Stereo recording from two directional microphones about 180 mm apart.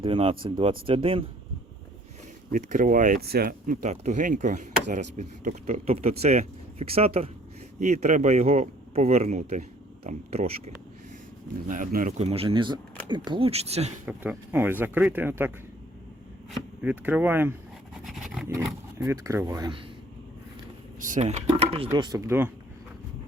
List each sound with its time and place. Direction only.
0.0 s speech: 30° right (ahead or behind)
2.5 s speech: 50° right (ahead or behind)
11.7 s speech: 50° right (ahead or behind)
14.0 s speech: 5° right (ahead or behind)
18.0 s a sound: centre (ahead or behind)
18.9 s speech: 15° right (ahead or behind)
21.0 s speech: 40° right (ahead or behind); by 22.5 s 10° right (ahead or behind)